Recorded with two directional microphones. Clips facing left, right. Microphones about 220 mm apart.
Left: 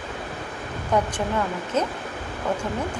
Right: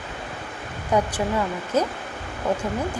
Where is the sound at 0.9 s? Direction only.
10° right (ahead or behind).